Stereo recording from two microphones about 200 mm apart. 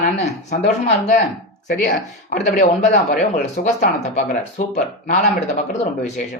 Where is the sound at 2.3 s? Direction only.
40° left (ahead or behind).